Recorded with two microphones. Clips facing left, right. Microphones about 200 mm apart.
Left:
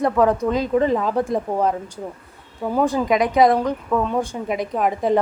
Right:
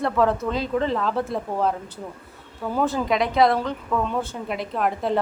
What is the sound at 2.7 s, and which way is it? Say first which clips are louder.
A woman's voice: left 4 dB; 15° left (ahead or behind).